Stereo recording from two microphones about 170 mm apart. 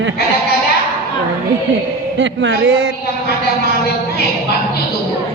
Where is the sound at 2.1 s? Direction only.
90° right.